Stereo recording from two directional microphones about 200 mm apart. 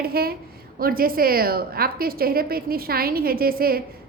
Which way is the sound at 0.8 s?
45° right (ahead or behind).